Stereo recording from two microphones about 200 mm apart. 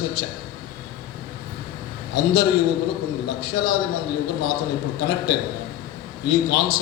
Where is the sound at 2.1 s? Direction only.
55° left (ahead or behind).